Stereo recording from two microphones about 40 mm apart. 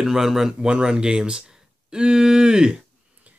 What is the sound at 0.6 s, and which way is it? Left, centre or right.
Speech, centre.